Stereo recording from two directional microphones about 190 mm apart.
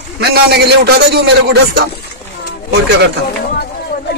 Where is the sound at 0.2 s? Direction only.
55° right (ahead or behind).